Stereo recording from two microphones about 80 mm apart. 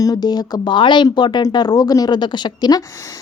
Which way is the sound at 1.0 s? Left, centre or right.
Left.